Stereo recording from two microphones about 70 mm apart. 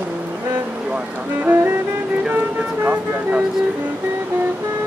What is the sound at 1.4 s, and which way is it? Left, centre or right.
Music, right.